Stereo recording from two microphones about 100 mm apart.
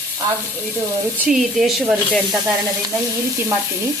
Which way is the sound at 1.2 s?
Centre (ahead or behind).